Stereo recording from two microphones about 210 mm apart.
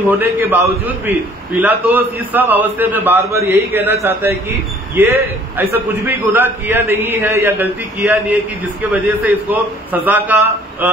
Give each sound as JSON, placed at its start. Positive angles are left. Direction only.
{"t": 0.2, "sound": "a man's voice", "side_deg": -10}
{"t": 1.6, "sound": "a man's voice", "side_deg": -10}